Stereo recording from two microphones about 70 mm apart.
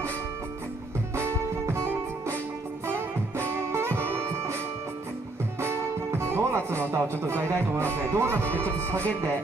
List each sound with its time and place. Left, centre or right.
1.1 s music: right
5.6 s music: right
6.9 s speech: right